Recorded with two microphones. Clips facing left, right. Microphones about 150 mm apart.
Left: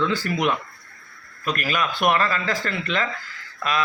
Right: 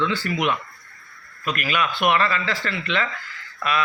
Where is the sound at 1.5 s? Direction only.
40° left (ahead or behind).